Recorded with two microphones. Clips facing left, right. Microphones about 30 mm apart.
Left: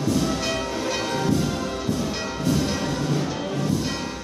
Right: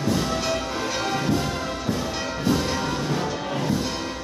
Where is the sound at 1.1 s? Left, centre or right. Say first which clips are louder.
Left 1 dB; centre.